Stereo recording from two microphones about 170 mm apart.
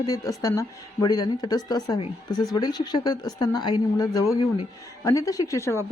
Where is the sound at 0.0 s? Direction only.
20° left (ahead or behind).